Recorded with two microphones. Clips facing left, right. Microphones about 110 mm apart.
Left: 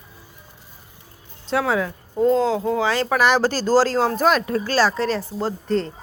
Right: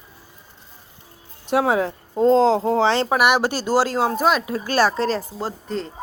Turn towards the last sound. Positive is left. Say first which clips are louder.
# left 5 dB
turn(degrees=0)  # may be behind; listen again after turning